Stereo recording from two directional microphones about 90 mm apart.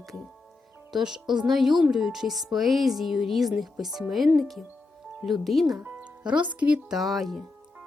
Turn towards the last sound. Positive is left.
turn(degrees=0)  # may be behind; listen again after turning